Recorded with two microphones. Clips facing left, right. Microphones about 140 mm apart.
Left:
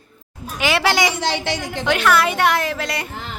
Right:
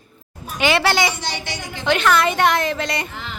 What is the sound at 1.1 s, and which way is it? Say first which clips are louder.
Speech: left 6 dB; 90° left.